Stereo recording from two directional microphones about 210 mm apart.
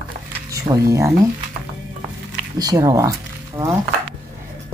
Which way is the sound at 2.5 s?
15° right (ahead or behind).